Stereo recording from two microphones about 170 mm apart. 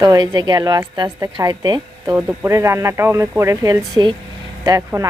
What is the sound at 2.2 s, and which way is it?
A woman's voice, 10° right (ahead or behind).